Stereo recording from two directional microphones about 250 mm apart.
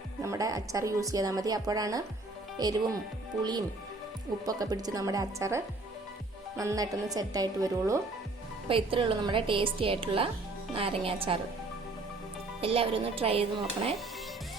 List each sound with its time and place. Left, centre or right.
0.2 s a woman's voice: centre
4.4 s a woman's voice: centre
12.6 s a woman's voice: right